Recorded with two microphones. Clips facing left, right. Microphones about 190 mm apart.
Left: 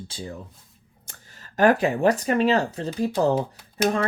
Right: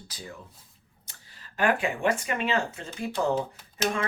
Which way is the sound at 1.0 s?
40° left (ahead or behind).